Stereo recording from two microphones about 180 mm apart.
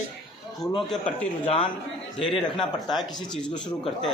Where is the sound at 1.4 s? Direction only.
30° left (ahead or behind).